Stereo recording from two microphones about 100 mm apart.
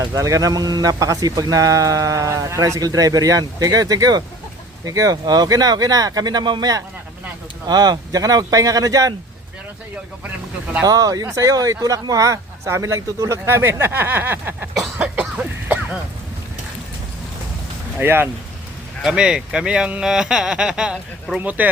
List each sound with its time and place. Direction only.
0.1 s speech: 35° right (ahead or behind)
10.8 s speech: 40° right (ahead or behind); by 14.7 s 20° right (ahead or behind)
14.9 s cough: 15° right (ahead or behind)
18.0 s speech: 20° right (ahead or behind)
19.0 s speech: 10° right (ahead or behind)